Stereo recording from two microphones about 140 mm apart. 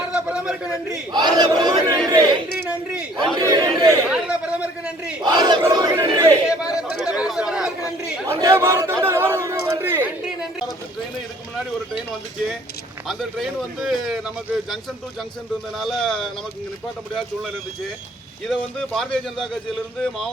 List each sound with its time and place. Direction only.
0.1 s a sound: 10° right (ahead or behind)
1.1 s speech: 30° right (ahead or behind)
2.6 s a man's voice: 10° right (ahead or behind)
3.3 s speech: 25° right (ahead or behind)
4.1 s a sound: 5° right (ahead or behind)
5.2 s speech: 30° right (ahead or behind)
6.7 s chatter: 5° right (ahead or behind)
8.3 s chatter: 20° right (ahead or behind)
10.2 s chatter: 5° right (ahead or behind)
13.1 s a man's voice: centre (ahead or behind)
15.8 s a man's voice: 5° left (ahead or behind)
18.4 s a man's voice: 5° left (ahead or behind)